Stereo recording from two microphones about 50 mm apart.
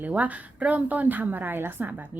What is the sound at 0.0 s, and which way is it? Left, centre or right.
A woman's voice, right.